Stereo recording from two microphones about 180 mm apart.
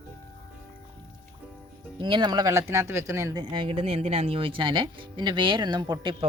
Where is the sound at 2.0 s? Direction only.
25° right (ahead or behind).